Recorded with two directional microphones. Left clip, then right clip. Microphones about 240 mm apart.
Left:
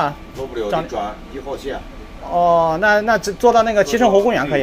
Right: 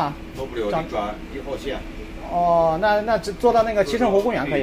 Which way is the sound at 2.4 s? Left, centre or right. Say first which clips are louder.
Left 3 dB; centre.